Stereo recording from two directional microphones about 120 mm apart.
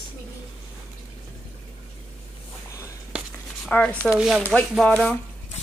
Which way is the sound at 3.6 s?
10° left (ahead or behind).